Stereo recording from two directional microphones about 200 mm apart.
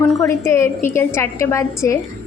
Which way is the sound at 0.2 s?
15° left (ahead or behind).